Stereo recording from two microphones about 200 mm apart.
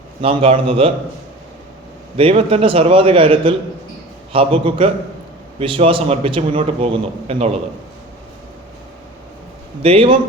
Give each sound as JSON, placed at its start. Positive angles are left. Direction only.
{"t": 0.2, "sound": "a man's voice", "side_deg": -30}
{"t": 2.1, "sound": "a man's voice", "side_deg": -30}
{"t": 9.8, "sound": "a man's voice", "side_deg": -25}